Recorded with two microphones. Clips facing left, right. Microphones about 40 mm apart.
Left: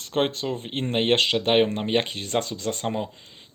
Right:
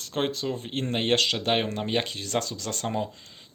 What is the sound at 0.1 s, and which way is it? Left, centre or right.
Speech, left.